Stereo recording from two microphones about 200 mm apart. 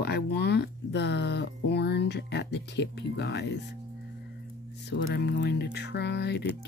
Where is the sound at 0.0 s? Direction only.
55° left (ahead or behind).